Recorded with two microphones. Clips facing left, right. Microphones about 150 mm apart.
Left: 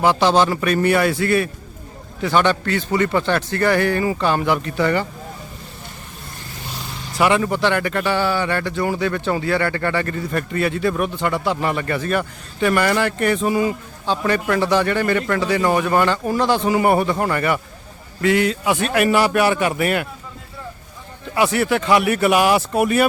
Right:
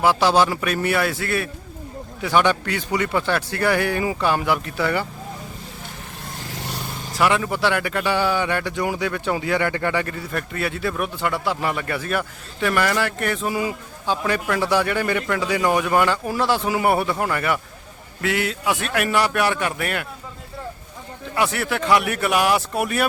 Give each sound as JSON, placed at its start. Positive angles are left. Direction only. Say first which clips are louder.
{"t": 0.0, "sound": "a man's voice", "louder": "left 2 dB", "side_deg": -5}
{"t": 6.5, "sound": "vehicle", "louder": "right 2 dB", "side_deg": -75}
{"t": 7.1, "sound": "speech", "louder": "left 3 dB", "side_deg": 0}
{"t": 21.3, "sound": "speech", "louder": "left 5 dB", "side_deg": 0}